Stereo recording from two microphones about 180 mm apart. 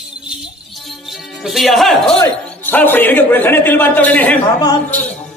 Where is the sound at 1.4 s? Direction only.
Centre (ahead or behind).